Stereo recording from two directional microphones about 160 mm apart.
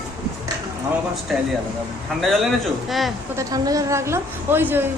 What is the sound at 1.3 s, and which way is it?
A man's voice, centre (ahead or behind).